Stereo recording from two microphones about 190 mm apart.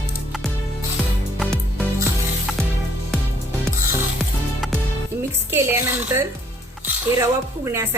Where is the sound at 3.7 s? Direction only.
15° right (ahead or behind).